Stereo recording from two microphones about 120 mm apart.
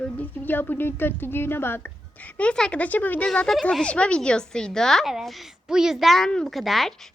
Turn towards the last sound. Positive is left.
turn(degrees=0)  # may be behind; listen again after turning